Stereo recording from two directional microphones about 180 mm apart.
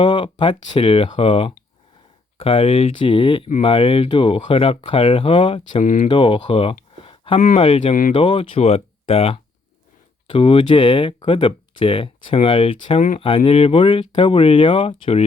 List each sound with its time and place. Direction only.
0.0 s speech: 25° left (ahead or behind)
5.8 s speech: 45° left (ahead or behind)
6.1 s speech: 25° left (ahead or behind)